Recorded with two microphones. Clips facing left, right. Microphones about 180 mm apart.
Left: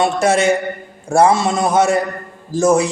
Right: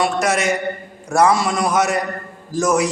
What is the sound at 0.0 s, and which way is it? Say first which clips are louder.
Speech: left 4 dB; 30° left (ahead or behind).